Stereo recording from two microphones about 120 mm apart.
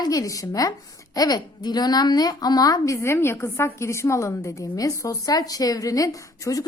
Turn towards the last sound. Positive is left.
turn(degrees=30)  # may be behind; listen again after turning